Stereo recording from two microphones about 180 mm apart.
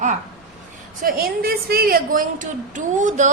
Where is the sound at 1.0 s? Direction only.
55° right (ahead or behind).